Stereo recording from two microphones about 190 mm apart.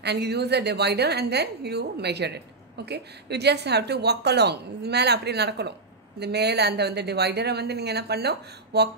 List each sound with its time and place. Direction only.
0.0 s a woman's voice: 60° right (ahead or behind)